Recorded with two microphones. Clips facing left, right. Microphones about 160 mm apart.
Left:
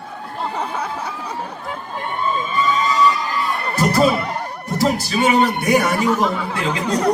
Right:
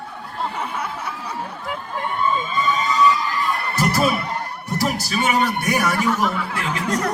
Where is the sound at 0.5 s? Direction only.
35° left (ahead or behind).